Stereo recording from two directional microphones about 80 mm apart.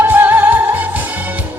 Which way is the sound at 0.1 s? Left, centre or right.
Right.